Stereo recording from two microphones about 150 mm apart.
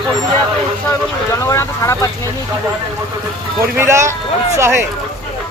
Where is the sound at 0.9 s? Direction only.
20° left (ahead or behind).